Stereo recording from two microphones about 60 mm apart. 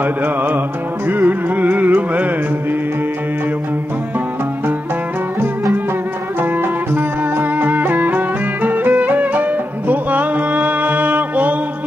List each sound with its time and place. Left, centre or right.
0.0 s music: right
6.6 s music: right